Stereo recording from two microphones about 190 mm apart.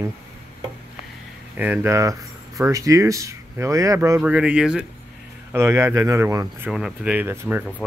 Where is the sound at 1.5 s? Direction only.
10° right (ahead or behind).